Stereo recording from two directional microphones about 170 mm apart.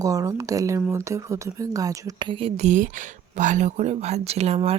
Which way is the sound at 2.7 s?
50° right (ahead or behind).